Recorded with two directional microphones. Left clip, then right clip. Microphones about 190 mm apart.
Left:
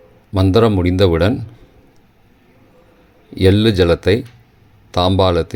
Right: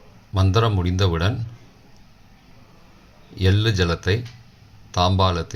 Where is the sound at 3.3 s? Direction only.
40° left (ahead or behind).